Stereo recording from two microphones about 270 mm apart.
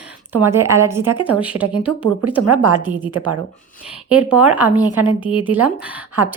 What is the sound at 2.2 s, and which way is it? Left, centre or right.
Speech, right.